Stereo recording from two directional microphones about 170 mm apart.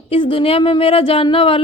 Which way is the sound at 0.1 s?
30° left (ahead or behind).